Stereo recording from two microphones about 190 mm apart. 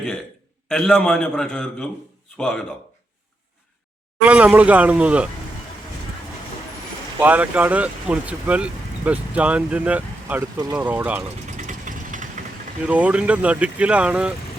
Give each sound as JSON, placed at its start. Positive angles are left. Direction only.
{"t": 0.7, "sound": "a man's voice", "side_deg": 5}
{"t": 4.3, "sound": "speech", "side_deg": -5}
{"t": 7.2, "sound": "speech", "side_deg": -10}
{"t": 11.5, "sound": "vehicle", "side_deg": -40}
{"t": 12.8, "sound": "speech", "side_deg": -5}